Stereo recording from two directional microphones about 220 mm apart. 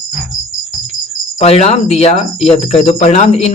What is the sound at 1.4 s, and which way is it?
Speech, 30° left (ahead or behind).